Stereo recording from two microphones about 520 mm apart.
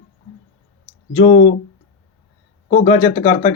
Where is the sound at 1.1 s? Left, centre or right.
Centre.